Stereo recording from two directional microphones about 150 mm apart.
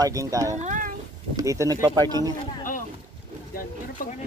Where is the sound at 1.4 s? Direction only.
25° right (ahead or behind).